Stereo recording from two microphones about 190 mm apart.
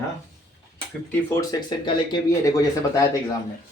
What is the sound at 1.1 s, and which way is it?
Speech, 15° left (ahead or behind).